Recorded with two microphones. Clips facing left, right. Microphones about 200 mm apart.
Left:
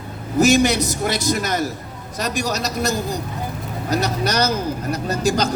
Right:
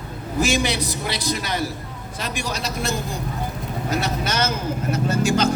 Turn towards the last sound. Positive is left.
turn(degrees=40)  # may be behind; listen again after turning